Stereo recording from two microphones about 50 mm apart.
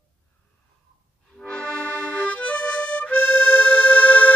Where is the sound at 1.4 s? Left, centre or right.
Left.